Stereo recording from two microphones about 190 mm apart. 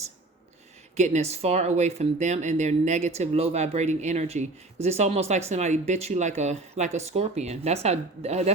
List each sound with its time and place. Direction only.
0.9 s speech: 35° right (ahead or behind)